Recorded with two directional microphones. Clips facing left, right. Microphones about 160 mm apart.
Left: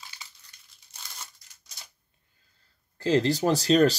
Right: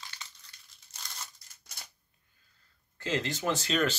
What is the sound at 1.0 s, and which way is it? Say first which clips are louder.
Crumpling: even; 5° left (ahead or behind).